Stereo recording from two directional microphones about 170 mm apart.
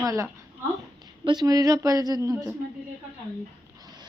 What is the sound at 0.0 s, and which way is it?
Speech, 20° right (ahead or behind).